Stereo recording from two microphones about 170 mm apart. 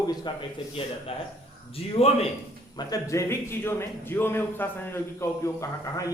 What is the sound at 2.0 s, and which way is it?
Speech, 35° left (ahead or behind).